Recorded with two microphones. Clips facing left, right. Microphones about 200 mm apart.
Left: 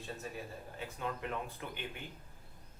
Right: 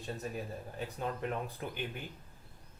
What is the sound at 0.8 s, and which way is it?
Speech, 35° right (ahead or behind).